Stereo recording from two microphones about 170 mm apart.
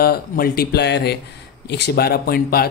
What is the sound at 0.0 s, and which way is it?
Speech, 65° left (ahead or behind).